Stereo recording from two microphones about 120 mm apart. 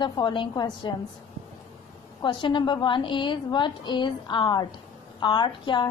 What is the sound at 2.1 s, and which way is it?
A woman's voice, 40° left (ahead or behind).